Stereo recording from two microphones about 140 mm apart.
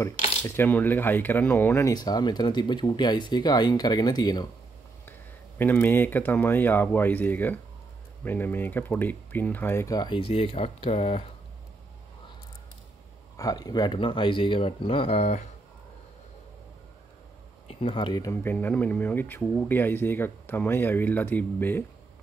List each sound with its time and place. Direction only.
0.4 s speech: 15° left (ahead or behind); by 4.5 s 30° left (ahead or behind)
5.6 s speech: 15° left (ahead or behind)
9.9 s speech: 35° left (ahead or behind)
13.4 s speech: 25° left (ahead or behind); by 15.4 s 50° left (ahead or behind)
17.7 s speech: 40° left (ahead or behind)
18.3 s speech: 15° left (ahead or behind)